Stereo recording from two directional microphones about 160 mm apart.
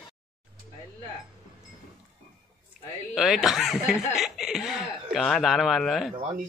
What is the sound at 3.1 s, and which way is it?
A man's voice, centre (ahead or behind).